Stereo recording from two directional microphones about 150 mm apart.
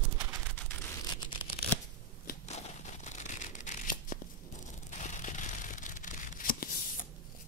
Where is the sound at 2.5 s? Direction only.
50° left (ahead or behind); by 7.0 s 70° left (ahead or behind).